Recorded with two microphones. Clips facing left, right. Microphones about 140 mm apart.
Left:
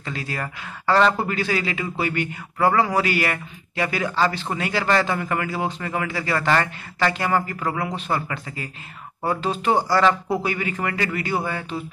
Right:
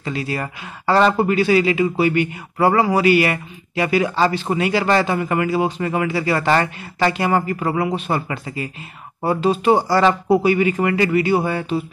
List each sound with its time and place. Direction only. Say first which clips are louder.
0.0 s speech: right 5 dB; 10° right (ahead or behind)